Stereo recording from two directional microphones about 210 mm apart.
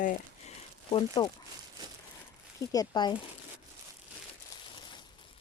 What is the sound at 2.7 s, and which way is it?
Speech, 20° left (ahead or behind).